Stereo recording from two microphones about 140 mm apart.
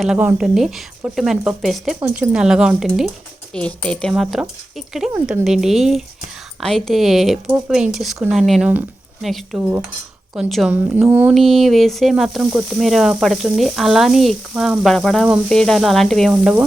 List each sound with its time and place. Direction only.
0.0 s speech: 10° right (ahead or behind)
9.6 s mantra: 15° right (ahead or behind)
10.3 s speech: 5° right (ahead or behind)
10.9 s mantra: 15° right (ahead or behind)
11.3 s speech: centre (ahead or behind)